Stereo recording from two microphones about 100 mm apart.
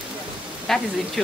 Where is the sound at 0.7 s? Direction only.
5° left (ahead or behind).